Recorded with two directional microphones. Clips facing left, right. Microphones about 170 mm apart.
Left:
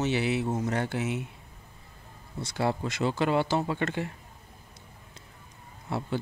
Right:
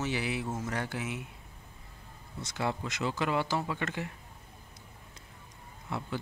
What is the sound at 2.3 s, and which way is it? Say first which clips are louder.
Speech: left 5 dB; 35° left (ahead or behind).